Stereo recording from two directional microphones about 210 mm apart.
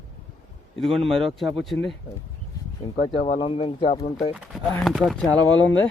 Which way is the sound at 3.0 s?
35° left (ahead or behind).